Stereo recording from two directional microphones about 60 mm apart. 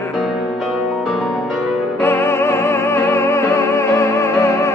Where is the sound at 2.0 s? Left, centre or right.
Left.